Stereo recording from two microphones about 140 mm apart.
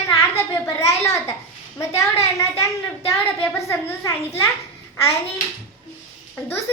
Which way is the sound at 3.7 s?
20° left (ahead or behind).